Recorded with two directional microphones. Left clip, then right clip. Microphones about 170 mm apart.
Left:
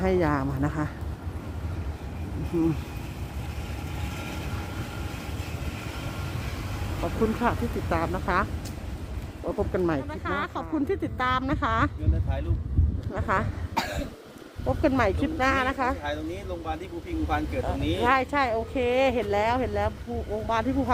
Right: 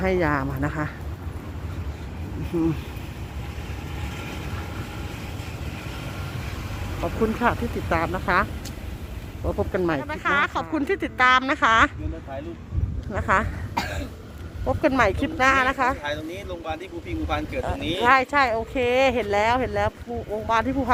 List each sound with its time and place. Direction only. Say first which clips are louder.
0.0 s speech: right 2 dB; 15° left (ahead or behind)
7.0 s speech: right 3 dB; centre (ahead or behind)
9.5 s speech: right 2 dB; 5° right (ahead or behind)
13.1 s speech: right 5 dB; centre (ahead or behind)
14.8 s speech: right 4 dB; 5° right (ahead or behind)
16.0 s speech: right 2 dB; 55° left (ahead or behind)
17.7 s speech: right 2 dB; 55° left (ahead or behind)
18.0 s speech: right 5 dB; 5° right (ahead or behind)